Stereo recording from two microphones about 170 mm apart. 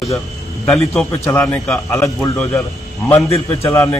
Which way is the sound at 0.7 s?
5° left (ahead or behind).